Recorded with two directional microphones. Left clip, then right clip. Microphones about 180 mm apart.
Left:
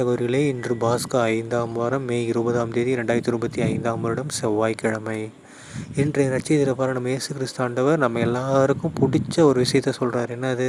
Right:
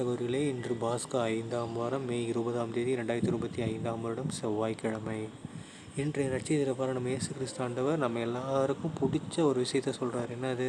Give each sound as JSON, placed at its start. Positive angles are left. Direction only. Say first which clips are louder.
{"t": 0.0, "sound": "speech", "louder": "left 10 dB", "side_deg": 40}